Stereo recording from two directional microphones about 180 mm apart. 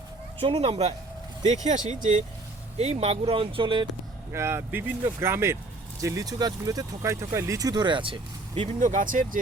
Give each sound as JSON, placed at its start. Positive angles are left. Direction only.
{"t": 0.4, "sound": "speech", "side_deg": -30}
{"t": 1.6, "sound": "speech", "side_deg": -45}
{"t": 4.3, "sound": "speech", "side_deg": -15}
{"t": 8.8, "sound": "speech", "side_deg": -45}